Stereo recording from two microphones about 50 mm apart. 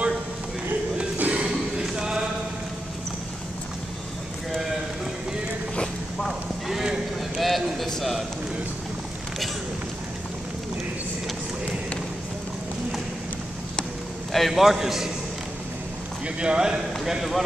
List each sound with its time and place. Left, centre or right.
1.1 s a sound: right
1.5 s music: centre
6.2 s clip-clop: centre
7.3 s a sound: centre
14.3 s a man's voice: centre
16.3 s speech: centre